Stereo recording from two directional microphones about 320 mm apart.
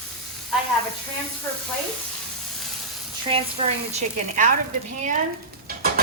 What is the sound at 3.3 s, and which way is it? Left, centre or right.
Speech, centre.